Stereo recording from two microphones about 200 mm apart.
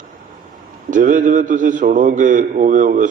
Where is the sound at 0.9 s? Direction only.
40° right (ahead or behind).